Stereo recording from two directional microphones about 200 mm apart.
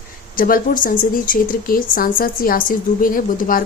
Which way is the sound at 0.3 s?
45° left (ahead or behind).